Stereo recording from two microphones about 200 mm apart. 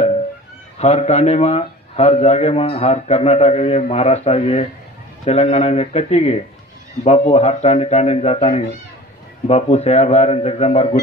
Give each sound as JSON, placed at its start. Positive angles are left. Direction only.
{"t": 0.7, "sound": "a man's voice", "side_deg": 30}